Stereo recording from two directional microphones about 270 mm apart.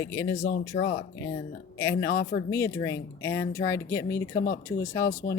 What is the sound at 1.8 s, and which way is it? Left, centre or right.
Speech, centre.